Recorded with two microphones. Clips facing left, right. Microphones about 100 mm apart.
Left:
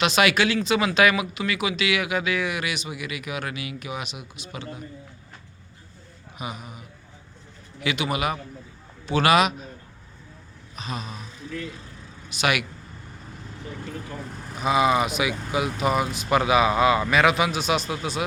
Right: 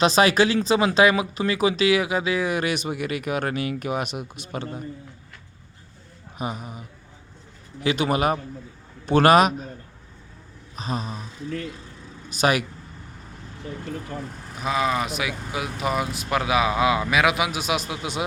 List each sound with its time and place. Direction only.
0.0 s speech: 35° right (ahead or behind)
6.4 s a man's voice: 40° right (ahead or behind)
10.8 s a sound: 35° right (ahead or behind)
12.3 s speech: 40° right (ahead or behind)
14.5 s speech: 5° left (ahead or behind)